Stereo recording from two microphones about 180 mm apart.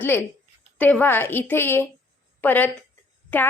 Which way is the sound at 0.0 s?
10° left (ahead or behind).